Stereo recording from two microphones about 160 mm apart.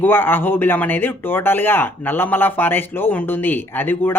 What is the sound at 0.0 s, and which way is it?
Speech, 15° left (ahead or behind).